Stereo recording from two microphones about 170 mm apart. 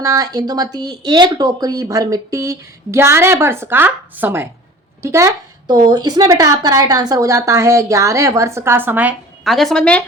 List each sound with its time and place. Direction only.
0.0 s a woman's voice: 20° right (ahead or behind); by 10.0 s 5° left (ahead or behind)